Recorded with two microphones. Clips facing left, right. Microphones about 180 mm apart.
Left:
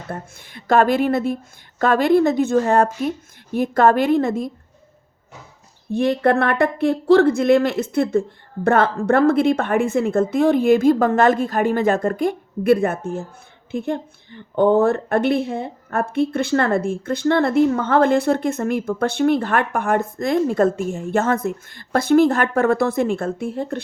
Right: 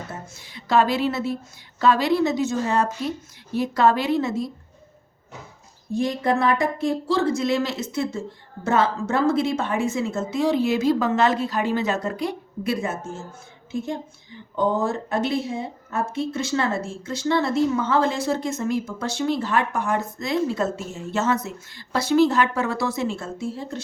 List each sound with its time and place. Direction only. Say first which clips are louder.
0.1 s a woman's voice: left 5 dB; 55° left (ahead or behind)
5.9 s a woman's voice: left 5 dB; 60° left (ahead or behind)